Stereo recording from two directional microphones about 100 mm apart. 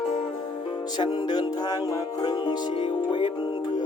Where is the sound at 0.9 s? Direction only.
45° left (ahead or behind).